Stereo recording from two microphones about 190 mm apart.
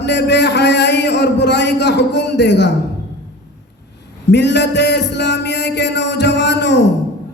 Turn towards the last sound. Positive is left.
turn(degrees=65)  # may be behind; listen again after turning